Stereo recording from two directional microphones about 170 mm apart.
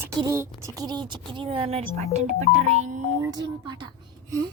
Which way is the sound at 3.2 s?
25° right (ahead or behind).